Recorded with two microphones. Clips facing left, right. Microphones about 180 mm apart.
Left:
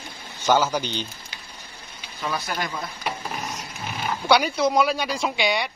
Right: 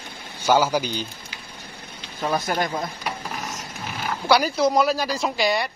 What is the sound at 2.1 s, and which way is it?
Speech, 45° right (ahead or behind).